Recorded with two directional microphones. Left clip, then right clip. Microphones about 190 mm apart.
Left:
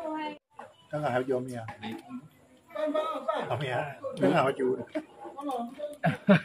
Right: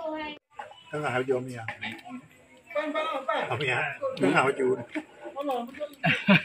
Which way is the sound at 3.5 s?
40° left (ahead or behind).